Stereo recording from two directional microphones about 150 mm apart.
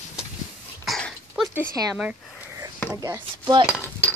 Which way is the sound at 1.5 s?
10° right (ahead or behind).